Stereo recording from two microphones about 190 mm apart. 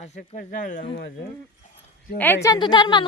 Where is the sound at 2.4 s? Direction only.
20° left (ahead or behind).